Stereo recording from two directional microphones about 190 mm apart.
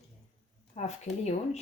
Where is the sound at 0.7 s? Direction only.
35° left (ahead or behind).